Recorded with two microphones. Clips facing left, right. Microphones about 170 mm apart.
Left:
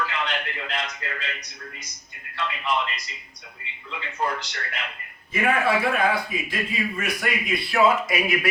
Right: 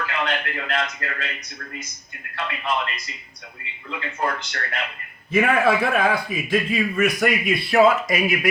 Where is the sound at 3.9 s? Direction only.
55° right (ahead or behind).